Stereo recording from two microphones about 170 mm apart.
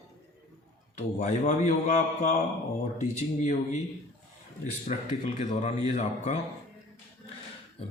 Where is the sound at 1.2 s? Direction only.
45° left (ahead or behind).